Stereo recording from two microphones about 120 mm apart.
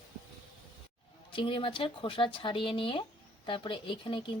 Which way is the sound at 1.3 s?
45° left (ahead or behind).